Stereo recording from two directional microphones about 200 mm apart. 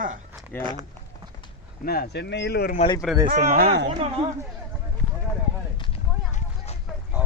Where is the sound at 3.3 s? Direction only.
40° right (ahead or behind).